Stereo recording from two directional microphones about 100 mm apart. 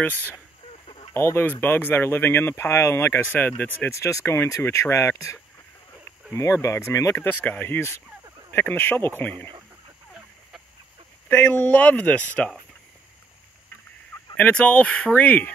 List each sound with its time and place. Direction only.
0.8 s fowl: 70° left (ahead or behind)
1.1 s speech: 25° left (ahead or behind)
3.9 s speech: 30° left (ahead or behind)
11.2 s speech: 15° left (ahead or behind)
14.3 s speech: 15° left (ahead or behind)